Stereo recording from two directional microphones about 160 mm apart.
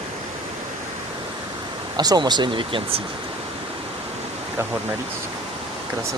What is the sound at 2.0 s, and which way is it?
Speech, 25° right (ahead or behind).